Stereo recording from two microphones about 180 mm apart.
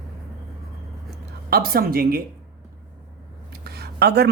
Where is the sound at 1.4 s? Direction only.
55° right (ahead or behind).